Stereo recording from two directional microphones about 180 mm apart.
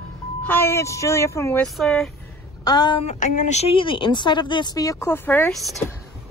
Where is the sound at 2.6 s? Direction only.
25° left (ahead or behind).